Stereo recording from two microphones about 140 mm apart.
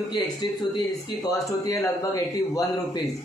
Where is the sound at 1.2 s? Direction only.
25° left (ahead or behind).